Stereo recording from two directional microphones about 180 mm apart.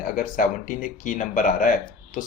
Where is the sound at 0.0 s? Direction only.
50° left (ahead or behind).